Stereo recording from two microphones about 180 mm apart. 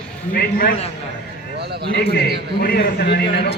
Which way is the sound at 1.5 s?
65° right (ahead or behind).